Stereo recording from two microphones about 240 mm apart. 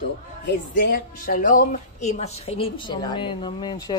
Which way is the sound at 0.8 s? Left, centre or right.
Left.